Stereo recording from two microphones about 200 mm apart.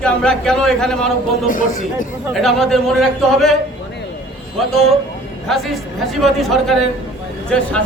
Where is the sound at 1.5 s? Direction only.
40° left (ahead or behind).